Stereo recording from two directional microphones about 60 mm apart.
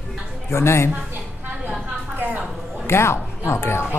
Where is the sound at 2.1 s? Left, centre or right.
Right.